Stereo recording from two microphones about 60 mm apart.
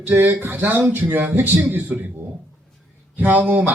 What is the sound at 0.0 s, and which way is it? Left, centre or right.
Speech, right.